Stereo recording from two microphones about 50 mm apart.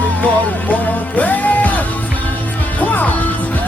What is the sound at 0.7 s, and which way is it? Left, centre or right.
Music, left.